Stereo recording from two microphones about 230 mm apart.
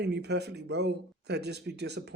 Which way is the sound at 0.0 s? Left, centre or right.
Right.